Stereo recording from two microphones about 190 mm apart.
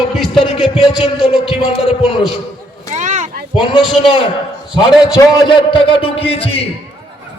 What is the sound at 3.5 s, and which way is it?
Speech, centre (ahead or behind).